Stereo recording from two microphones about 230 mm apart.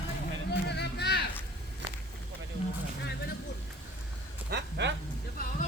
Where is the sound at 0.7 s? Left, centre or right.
Left.